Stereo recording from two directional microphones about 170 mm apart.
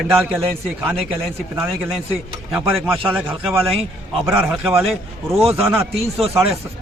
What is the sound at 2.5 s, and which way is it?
A man's voice, 5° right (ahead or behind).